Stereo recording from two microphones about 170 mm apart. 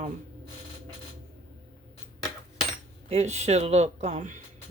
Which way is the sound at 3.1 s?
40° right (ahead or behind).